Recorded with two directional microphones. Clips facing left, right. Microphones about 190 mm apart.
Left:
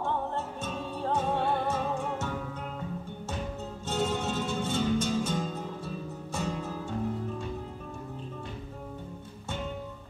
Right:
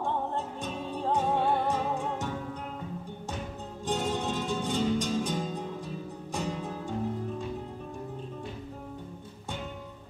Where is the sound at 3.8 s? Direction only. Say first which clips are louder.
Even; 15° right (ahead or behind).